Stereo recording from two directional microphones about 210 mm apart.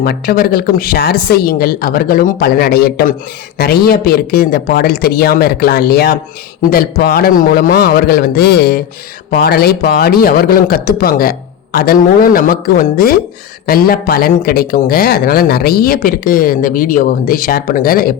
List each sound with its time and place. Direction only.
0.0 s speech: 45° left (ahead or behind)